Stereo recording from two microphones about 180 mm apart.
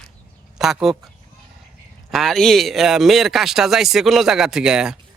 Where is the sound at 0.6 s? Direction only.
Centre (ahead or behind).